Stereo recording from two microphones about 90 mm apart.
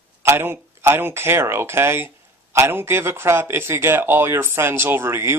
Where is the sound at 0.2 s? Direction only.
25° right (ahead or behind).